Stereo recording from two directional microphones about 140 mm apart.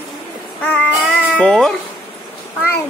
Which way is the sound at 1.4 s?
5° left (ahead or behind).